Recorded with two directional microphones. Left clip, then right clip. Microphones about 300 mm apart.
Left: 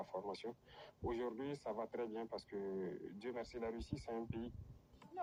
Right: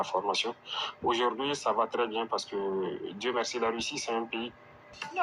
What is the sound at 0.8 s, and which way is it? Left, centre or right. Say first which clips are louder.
Speech: right 16 dB; centre.